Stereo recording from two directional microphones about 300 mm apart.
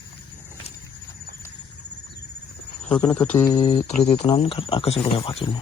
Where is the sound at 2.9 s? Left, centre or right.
Centre.